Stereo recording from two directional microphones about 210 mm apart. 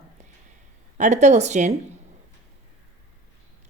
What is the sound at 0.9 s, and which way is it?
Speech, 35° right (ahead or behind).